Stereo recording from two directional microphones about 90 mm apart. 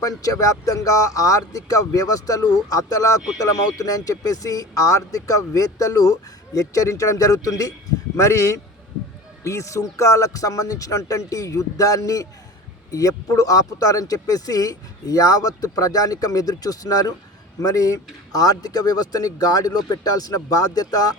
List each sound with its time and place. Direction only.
0.0 s speech: 40° left (ahead or behind)